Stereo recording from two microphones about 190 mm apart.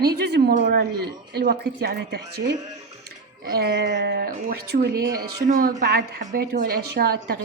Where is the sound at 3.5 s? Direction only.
55° right (ahead or behind).